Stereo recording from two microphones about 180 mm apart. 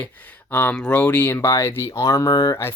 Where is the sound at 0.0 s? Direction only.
10° left (ahead or behind).